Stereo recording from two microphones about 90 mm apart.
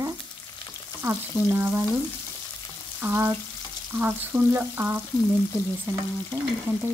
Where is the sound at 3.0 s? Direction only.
25° right (ahead or behind).